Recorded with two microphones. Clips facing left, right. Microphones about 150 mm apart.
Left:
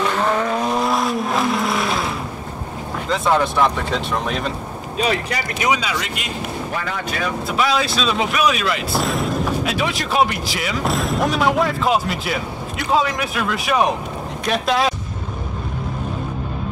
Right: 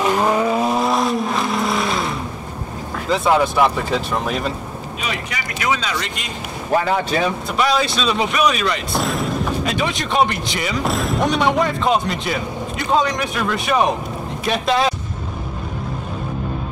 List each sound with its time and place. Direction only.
0.0 s vehicle: 15° right (ahead or behind)
3.1 s speech: 5° right (ahead or behind)
5.0 s speech: 35° left (ahead or behind)
5.6 s speech: 10° left (ahead or behind)
6.8 s speech: 30° right (ahead or behind)
7.5 s speech: centre (ahead or behind)